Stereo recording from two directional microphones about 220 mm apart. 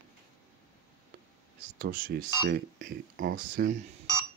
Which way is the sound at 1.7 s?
40° right (ahead or behind).